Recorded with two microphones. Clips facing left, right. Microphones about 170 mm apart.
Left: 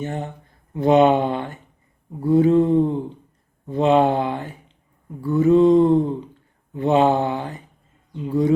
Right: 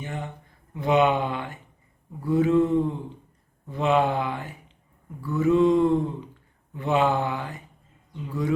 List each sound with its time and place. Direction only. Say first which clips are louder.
0.0 s speech: left 6 dB; 45° left (ahead or behind)
6.7 s mantra: left 6 dB; 30° left (ahead or behind)